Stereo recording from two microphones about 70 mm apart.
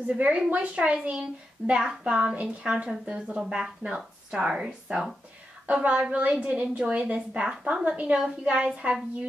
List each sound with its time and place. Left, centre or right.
0.0 s a woman's voice: centre